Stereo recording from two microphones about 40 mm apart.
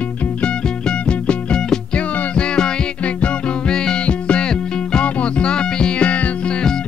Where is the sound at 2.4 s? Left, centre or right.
Left.